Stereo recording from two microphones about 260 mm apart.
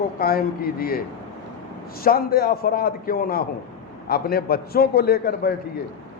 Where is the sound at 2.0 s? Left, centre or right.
Left.